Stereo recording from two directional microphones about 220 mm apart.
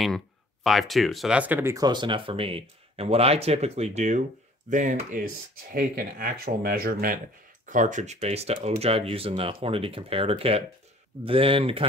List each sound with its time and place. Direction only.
0.7 s speech: centre (ahead or behind); by 11.8 s 25° right (ahead or behind)